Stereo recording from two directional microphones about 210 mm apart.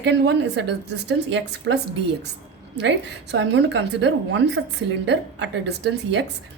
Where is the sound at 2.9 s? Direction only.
60° right (ahead or behind).